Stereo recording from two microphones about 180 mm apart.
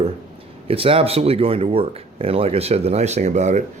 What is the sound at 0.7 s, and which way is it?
Speech, 30° right (ahead or behind).